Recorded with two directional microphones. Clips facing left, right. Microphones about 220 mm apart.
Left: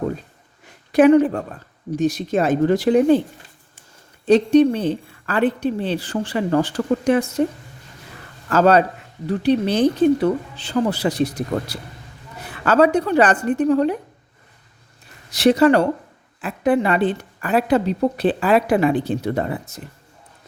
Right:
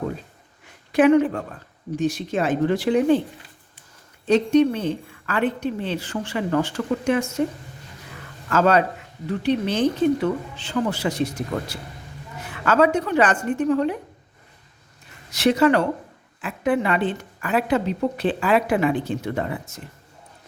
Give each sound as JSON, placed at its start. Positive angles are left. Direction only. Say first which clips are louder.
{"t": 0.9, "sound": "a woman's voice", "louder": "left 3 dB", "side_deg": 35}
{"t": 4.3, "sound": "a woman's voice", "louder": "left 4 dB", "side_deg": 35}
{"t": 8.4, "sound": "a woman's voice", "louder": "left 4 dB", "side_deg": 35}
{"t": 15.3, "sound": "a woman's voice", "louder": "left 4 dB", "side_deg": 35}